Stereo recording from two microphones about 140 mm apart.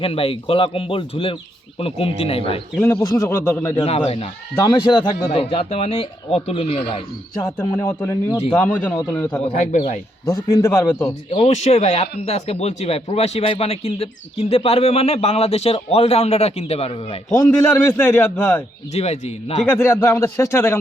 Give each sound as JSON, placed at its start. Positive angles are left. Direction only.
{"t": 0.0, "sound": "speech", "side_deg": 40}
{"t": 2.8, "sound": "speech", "side_deg": 20}
{"t": 3.8, "sound": "speech", "side_deg": 45}
{"t": 4.5, "sound": "speech", "side_deg": 30}
{"t": 7.9, "sound": "a man's voice", "side_deg": 20}
{"t": 9.4, "sound": "speech", "side_deg": 50}
{"t": 10.2, "sound": "speech", "side_deg": 20}
{"t": 11.3, "sound": "speech", "side_deg": 50}
{"t": 17.5, "sound": "a man's voice", "side_deg": 10}
{"t": 18.9, "sound": "speech", "side_deg": 50}
{"t": 19.7, "sound": "speech", "side_deg": 15}